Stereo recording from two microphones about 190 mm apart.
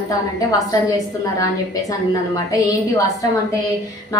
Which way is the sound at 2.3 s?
20° left (ahead or behind).